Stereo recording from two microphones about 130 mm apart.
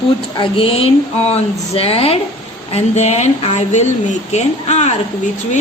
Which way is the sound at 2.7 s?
60° left (ahead or behind).